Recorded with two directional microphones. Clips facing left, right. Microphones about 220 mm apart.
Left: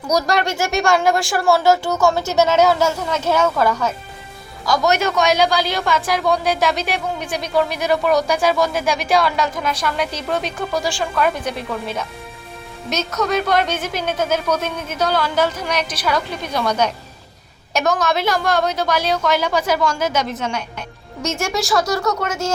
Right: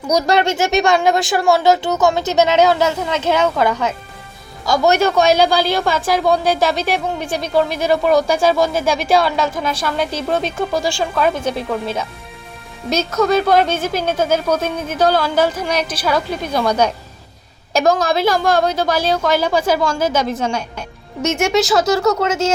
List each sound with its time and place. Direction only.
0.1 s a woman's voice: 25° right (ahead or behind)
12.9 s a woman's voice: 30° right (ahead or behind)